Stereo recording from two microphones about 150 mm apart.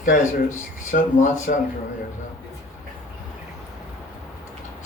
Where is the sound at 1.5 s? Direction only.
85° left.